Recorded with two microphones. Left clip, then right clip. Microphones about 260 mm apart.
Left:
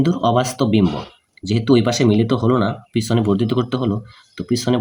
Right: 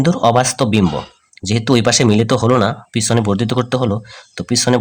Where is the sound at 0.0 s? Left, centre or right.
Right.